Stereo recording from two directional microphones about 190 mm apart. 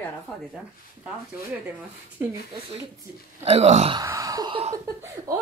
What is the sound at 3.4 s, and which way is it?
Speech, 35° right (ahead or behind).